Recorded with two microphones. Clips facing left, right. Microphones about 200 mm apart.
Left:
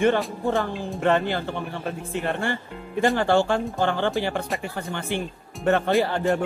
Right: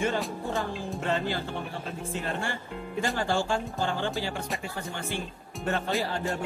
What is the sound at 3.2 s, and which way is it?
Speech, 60° left (ahead or behind).